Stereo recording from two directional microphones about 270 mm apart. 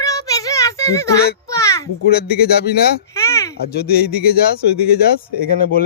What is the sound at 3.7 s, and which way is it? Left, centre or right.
Speech, left.